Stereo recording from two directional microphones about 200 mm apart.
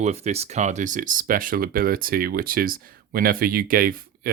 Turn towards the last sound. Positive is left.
turn(degrees=-45)  # may be behind; listen again after turning